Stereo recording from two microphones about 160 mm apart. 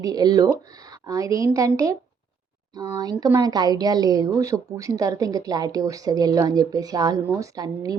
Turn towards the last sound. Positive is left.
turn(degrees=-25)  # may be behind; listen again after turning